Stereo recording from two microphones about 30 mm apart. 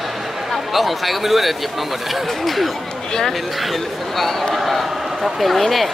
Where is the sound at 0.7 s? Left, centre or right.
Centre.